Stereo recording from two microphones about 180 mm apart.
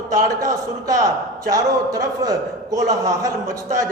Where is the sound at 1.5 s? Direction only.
20° right (ahead or behind).